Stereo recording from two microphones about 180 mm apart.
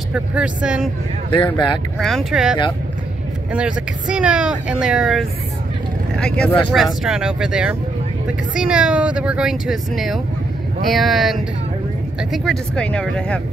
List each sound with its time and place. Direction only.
0.1 s speech: 5° right (ahead or behind)
1.3 s speech: 25° left (ahead or behind)
2.0 s speech: centre (ahead or behind)
3.5 s speech: 5° right (ahead or behind)